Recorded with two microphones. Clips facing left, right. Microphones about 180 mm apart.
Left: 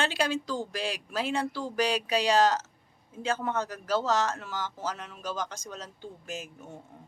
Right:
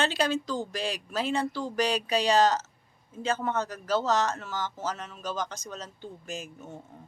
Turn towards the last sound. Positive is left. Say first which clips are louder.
# right 1 dB
turn(degrees=10)  # may be behind; listen again after turning